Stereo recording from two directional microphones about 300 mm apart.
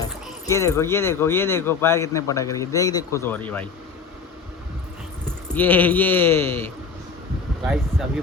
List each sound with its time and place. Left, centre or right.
0.0 s speech: centre
5.5 s speech: centre